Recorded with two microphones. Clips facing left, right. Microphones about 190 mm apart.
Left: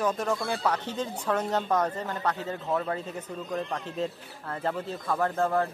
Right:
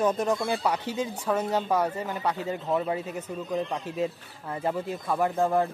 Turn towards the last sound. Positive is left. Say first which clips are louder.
# right 2 dB
turn(degrees=-15)  # may be behind; listen again after turning